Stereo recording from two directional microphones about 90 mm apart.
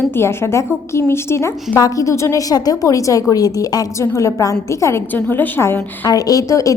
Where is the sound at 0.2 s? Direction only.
30° left (ahead or behind).